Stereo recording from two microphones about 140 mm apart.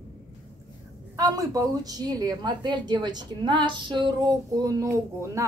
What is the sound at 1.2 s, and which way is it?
A woman's voice, 25° right (ahead or behind).